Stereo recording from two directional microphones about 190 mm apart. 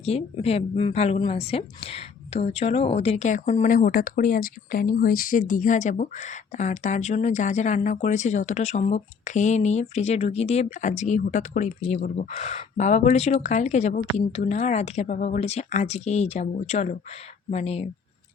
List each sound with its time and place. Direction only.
0.0 s a woman's voice: 35° left (ahead or behind)